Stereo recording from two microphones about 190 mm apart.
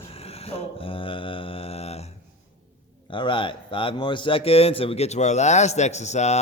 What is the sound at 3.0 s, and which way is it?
A man's voice, 25° left (ahead or behind).